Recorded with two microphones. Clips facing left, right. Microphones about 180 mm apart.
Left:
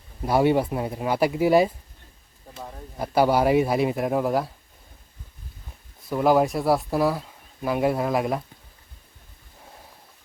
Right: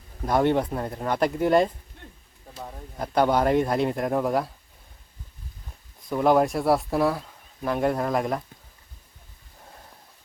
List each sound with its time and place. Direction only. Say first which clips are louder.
0.3 s speech: left 2 dB; 5° left (ahead or behind)
6.1 s speech: left 1 dB; 5° left (ahead or behind)